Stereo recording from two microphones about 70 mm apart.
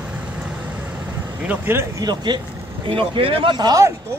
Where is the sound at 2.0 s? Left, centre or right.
Right.